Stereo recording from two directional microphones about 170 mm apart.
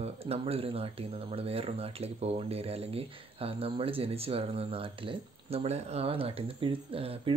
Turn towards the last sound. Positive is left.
turn(degrees=-35)  # may be behind; listen again after turning